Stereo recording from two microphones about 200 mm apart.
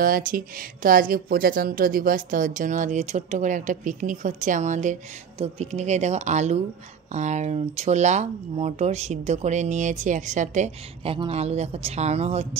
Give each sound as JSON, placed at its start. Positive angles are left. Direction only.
{"t": 0.0, "sound": "speech", "side_deg": -45}